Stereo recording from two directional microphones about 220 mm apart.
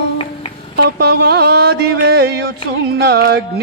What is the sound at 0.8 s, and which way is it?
Music, 45° right (ahead or behind).